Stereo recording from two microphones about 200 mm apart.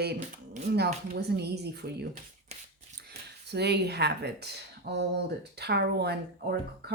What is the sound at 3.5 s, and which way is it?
Speech, 55° right (ahead or behind).